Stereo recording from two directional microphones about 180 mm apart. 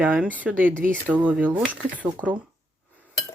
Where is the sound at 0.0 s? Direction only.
10° right (ahead or behind).